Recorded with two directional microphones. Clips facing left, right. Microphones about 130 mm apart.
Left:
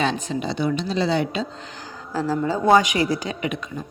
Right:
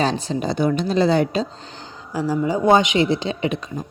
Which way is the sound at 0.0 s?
35° right (ahead or behind).